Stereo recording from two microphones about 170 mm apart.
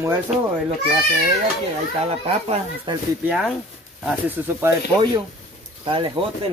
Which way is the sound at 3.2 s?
Centre (ahead or behind).